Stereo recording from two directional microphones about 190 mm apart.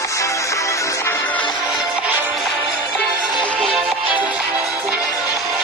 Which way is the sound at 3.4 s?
Centre (ahead or behind).